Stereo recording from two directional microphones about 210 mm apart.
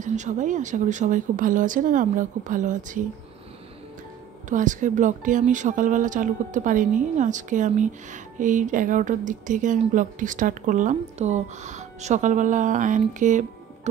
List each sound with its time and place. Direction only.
0.0 s speech: 35° right (ahead or behind)
4.5 s speech: 35° right (ahead or behind)